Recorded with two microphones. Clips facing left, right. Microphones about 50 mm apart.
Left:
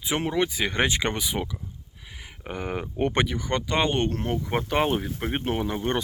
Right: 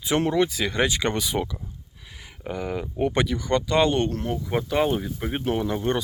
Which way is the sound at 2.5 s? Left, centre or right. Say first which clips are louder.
Right 2 dB; left.